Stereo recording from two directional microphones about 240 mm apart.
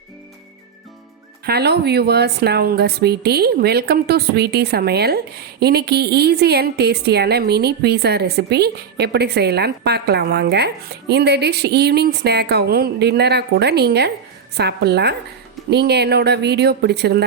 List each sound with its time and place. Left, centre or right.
1.5 s speech: right